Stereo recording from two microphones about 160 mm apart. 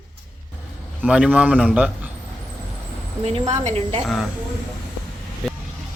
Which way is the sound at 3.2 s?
45° right (ahead or behind).